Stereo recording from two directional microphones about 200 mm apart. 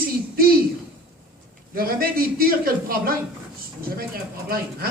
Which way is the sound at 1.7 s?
45° right (ahead or behind).